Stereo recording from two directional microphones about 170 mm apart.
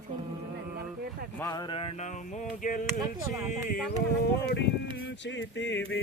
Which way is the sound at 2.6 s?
50° left (ahead or behind).